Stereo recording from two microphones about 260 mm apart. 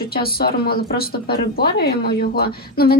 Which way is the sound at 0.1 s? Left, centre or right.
Left.